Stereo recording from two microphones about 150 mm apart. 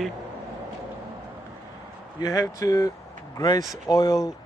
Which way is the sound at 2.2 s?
25° left (ahead or behind).